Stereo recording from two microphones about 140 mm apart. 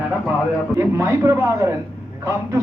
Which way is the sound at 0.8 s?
20° right (ahead or behind).